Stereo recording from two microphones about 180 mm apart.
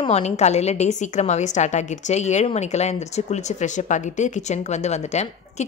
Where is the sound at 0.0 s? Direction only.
35° left (ahead or behind).